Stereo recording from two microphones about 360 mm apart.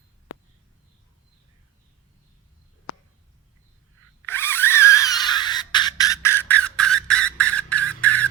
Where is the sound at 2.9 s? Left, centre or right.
Left.